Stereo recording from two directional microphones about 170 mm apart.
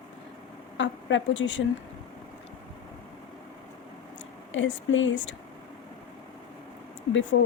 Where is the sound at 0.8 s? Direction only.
90° left.